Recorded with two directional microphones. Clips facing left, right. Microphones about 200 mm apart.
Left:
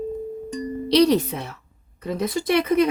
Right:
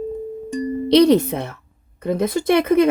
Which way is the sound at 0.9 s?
55° right (ahead or behind).